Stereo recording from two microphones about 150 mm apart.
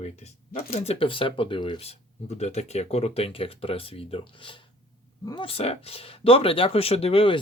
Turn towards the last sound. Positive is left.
turn(degrees=35)  # may be behind; listen again after turning